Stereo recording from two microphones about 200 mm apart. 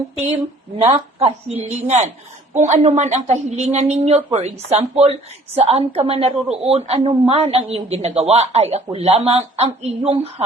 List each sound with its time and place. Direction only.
0.9 s a woman's voice: 30° right (ahead or behind)